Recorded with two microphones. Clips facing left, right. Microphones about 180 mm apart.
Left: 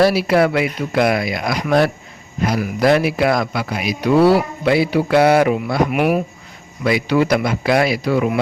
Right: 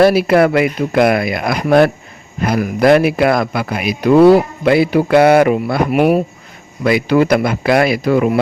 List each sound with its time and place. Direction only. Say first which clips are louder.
0.0 s a man's voice: right 4 dB; 55° right (ahead or behind)
5.9 s speech: right 8 dB; 30° right (ahead or behind)
6.8 s speech: right 4 dB; 50° right (ahead or behind)